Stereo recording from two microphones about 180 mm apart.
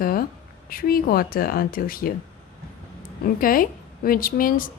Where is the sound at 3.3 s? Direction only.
50° left (ahead or behind).